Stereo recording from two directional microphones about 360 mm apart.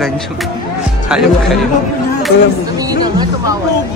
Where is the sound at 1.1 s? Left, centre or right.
Centre.